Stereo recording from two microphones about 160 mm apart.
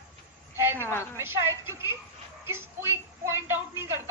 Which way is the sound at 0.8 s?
15° left (ahead or behind).